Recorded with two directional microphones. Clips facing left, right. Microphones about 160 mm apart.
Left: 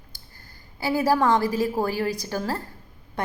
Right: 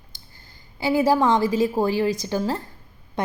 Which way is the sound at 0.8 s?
20° right (ahead or behind).